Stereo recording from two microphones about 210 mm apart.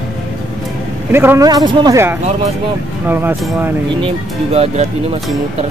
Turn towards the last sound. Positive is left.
turn(degrees=-30)  # may be behind; listen again after turning